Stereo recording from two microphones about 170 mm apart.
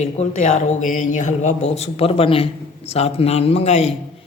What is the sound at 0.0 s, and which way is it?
A man's voice, 45° left (ahead or behind).